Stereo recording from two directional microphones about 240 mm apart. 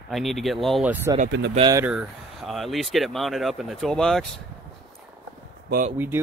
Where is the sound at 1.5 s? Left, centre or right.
Centre.